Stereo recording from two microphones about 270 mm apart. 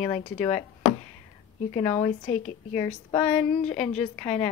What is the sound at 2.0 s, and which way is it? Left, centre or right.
A woman's voice, left.